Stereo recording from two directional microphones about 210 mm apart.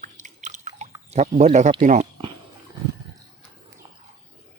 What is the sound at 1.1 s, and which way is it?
Speech, 35° right (ahead or behind).